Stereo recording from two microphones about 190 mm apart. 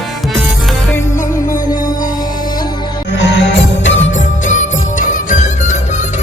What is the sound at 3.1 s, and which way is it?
Music, 70° left (ahead or behind).